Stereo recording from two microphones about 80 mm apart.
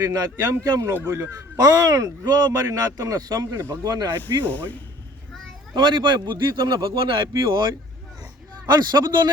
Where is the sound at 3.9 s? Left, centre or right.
Right.